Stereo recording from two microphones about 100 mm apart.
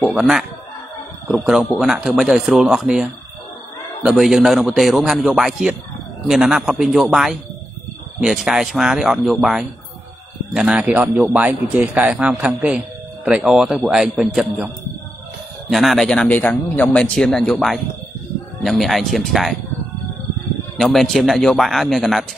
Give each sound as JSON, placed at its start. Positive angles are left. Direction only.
{"t": 0.1, "sound": "speech", "side_deg": -5}
{"t": 15.7, "sound": "speech", "side_deg": 0}
{"t": 16.3, "sound": "speech", "side_deg": 15}
{"t": 17.1, "sound": "speech", "side_deg": 5}
{"t": 20.7, "sound": "speech", "side_deg": 0}